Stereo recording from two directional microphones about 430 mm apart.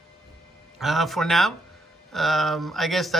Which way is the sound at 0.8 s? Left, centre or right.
Centre.